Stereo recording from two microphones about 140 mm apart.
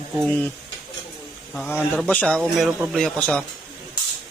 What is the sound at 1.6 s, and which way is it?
Speech, 10° left (ahead or behind).